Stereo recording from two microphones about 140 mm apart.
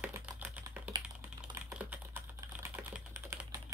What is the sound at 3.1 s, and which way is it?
Typing, 15° right (ahead or behind).